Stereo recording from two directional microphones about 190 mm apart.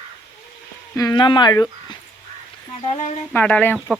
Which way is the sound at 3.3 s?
10° left (ahead or behind).